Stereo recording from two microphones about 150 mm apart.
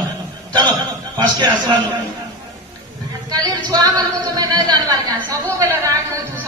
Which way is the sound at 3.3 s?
25° right (ahead or behind).